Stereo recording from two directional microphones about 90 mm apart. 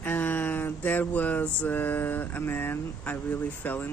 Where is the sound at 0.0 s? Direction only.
20° left (ahead or behind).